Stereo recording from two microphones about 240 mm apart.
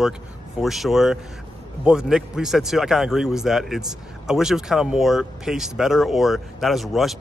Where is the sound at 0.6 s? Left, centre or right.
Centre.